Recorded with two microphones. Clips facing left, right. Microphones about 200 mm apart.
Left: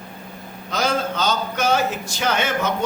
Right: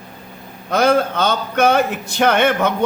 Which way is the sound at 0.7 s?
60° right (ahead or behind).